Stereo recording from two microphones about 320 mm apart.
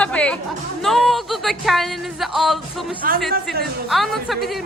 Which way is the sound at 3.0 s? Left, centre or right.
Right.